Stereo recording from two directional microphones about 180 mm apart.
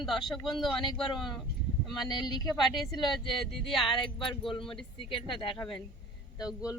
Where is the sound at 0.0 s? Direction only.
Centre (ahead or behind).